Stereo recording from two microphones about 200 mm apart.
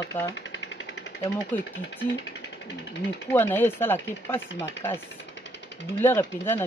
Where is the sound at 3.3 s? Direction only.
10° left (ahead or behind).